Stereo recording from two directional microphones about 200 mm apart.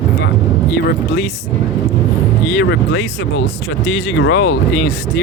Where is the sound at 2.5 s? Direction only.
60° left (ahead or behind).